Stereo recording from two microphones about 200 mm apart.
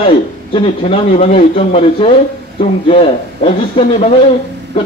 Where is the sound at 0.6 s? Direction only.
30° left (ahead or behind).